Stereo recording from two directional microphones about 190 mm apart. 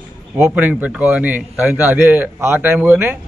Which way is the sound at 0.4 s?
10° right (ahead or behind).